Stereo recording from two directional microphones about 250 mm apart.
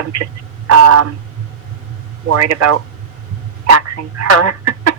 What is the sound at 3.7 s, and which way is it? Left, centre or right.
Speech, right.